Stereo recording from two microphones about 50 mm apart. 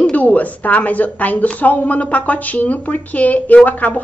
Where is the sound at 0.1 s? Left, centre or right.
Left.